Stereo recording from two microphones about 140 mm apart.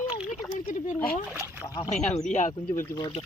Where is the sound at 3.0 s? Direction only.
30° left (ahead or behind).